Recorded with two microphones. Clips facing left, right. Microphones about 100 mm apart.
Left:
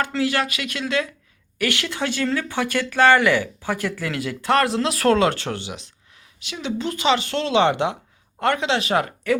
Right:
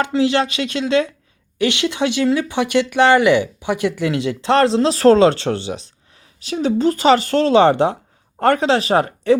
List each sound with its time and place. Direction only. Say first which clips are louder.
0.0 s speech: right 5 dB; 25° right (ahead or behind)